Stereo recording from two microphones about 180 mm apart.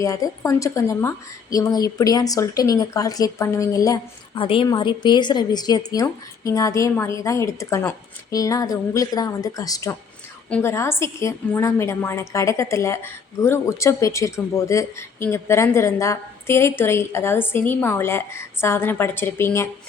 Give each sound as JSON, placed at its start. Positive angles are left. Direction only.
{"t": 0.0, "sound": "a woman's voice", "side_deg": 20}